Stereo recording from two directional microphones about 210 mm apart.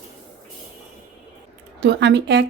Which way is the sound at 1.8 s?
55° right (ahead or behind).